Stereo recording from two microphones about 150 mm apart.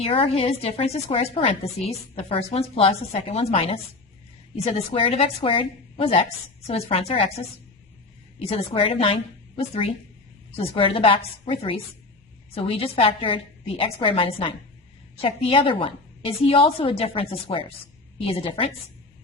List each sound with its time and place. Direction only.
0.0 s a woman's voice: 40° left (ahead or behind)